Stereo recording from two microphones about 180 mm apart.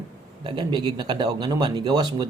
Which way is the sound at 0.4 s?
25° right (ahead or behind).